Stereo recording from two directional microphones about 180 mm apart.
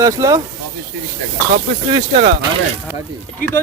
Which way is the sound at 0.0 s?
20° right (ahead or behind).